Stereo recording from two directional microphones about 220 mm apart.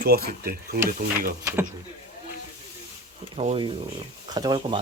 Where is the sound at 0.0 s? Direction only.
45° right (ahead or behind).